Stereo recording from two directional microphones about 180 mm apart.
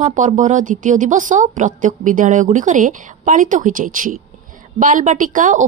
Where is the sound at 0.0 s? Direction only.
45° right (ahead or behind).